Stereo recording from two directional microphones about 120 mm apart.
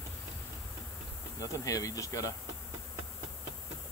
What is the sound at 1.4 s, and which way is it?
Speech, 30° left (ahead or behind).